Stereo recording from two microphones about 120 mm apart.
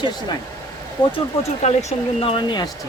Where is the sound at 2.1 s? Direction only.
50° left (ahead or behind).